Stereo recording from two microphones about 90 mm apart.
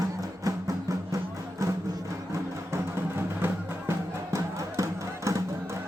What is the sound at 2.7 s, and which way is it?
Music, 25° right (ahead or behind).